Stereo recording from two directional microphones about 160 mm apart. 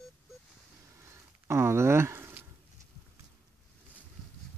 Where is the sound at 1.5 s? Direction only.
15° right (ahead or behind).